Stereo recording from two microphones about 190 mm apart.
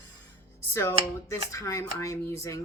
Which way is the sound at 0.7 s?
15° left (ahead or behind).